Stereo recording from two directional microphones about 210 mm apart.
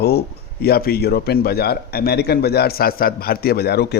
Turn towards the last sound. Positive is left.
turn(degrees=50)  # may be behind; listen again after turning